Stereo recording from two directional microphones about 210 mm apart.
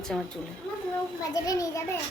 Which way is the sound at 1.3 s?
15° left (ahead or behind).